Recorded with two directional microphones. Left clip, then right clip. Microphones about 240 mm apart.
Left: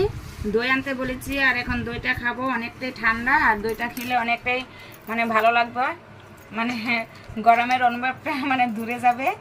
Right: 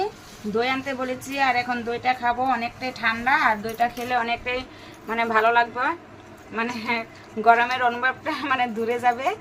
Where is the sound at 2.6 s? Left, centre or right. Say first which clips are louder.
Even; right.